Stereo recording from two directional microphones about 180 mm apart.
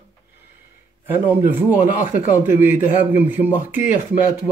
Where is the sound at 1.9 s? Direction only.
45° left (ahead or behind).